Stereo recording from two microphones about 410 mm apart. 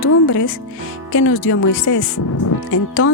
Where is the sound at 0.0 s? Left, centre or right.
Left.